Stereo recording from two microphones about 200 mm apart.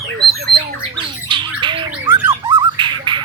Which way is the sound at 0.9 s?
25° right (ahead or behind).